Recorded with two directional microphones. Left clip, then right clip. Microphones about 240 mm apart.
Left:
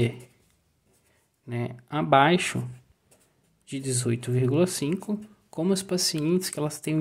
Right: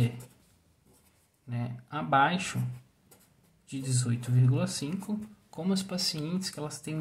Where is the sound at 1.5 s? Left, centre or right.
Left.